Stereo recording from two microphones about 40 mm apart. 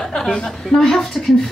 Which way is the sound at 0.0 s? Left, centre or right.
Centre.